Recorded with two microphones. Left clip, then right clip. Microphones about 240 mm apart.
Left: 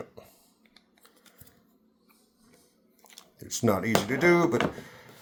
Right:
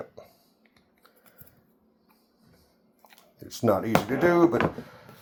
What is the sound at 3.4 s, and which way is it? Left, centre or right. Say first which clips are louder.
Speech: right 2 dB; left.